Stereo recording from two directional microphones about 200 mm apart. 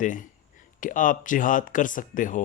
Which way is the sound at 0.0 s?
40° left (ahead or behind).